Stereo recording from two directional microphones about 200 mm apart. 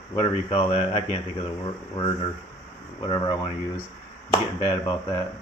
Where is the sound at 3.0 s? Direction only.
25° left (ahead or behind).